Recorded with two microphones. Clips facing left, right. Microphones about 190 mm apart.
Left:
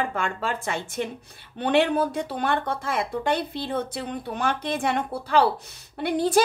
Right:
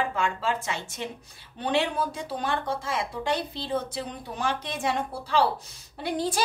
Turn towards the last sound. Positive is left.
turn(degrees=60)  # may be behind; listen again after turning